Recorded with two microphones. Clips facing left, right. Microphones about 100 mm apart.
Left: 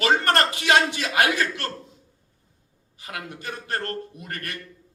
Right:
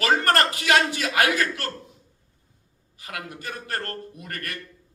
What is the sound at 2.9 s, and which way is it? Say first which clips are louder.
A man's voice: even; 30° left (ahead or behind).